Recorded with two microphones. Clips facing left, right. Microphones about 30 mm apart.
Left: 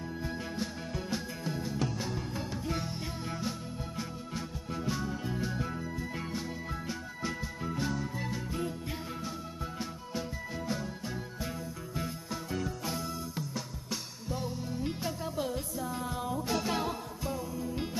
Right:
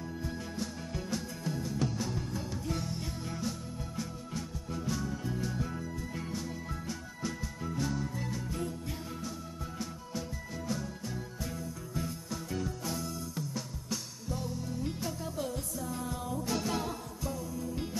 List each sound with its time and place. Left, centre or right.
0.2 s music: left
9.8 s music: left